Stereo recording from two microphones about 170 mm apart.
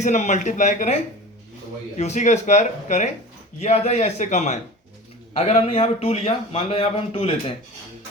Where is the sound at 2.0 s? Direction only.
40° left (ahead or behind).